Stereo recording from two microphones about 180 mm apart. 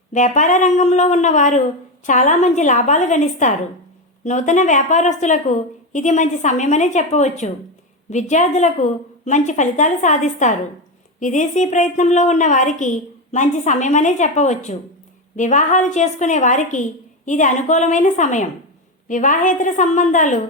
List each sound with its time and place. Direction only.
0.1 s a woman's voice: 45° left (ahead or behind)